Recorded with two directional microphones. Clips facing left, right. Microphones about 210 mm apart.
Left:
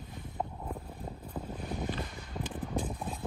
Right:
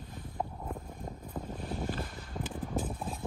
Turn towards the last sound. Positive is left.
turn(degrees=-5)  # may be behind; listen again after turning